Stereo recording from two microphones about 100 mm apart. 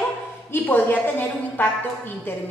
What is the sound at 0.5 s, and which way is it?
A woman's voice, 20° left (ahead or behind).